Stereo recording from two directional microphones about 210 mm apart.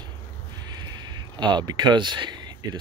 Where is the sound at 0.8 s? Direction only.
20° right (ahead or behind).